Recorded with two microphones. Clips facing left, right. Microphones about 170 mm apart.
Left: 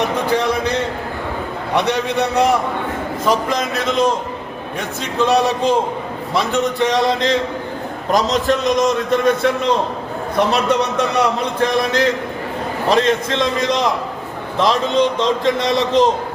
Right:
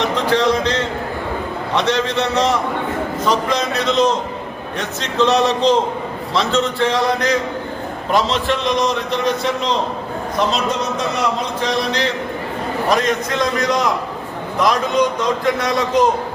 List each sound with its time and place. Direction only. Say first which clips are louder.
0.3 s a sound: right 1 dB; 10° left (ahead or behind)
1.7 s a man's voice: even; 10° left (ahead or behind)
8.1 s a man's voice: left 2 dB; 40° left (ahead or behind)
10.5 s a man's voice: left 3 dB; 65° left (ahead or behind)
11.6 s a man's voice: left 4 dB; 50° left (ahead or behind)
12.9 s a man's voice: left 3 dB; 30° left (ahead or behind)